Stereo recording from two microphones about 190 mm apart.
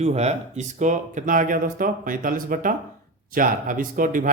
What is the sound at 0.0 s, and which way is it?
Speech, 35° right (ahead or behind).